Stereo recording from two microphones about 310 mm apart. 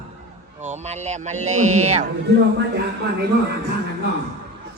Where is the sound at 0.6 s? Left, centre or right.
Right.